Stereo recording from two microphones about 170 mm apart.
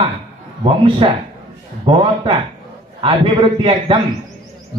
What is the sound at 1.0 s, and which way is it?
A man's voice, 30° right (ahead or behind).